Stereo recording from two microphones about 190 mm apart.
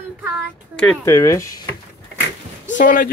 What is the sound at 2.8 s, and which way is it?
Speech, 45° left (ahead or behind).